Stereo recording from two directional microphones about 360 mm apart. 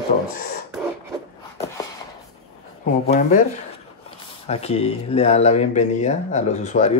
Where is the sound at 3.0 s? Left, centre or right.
Left.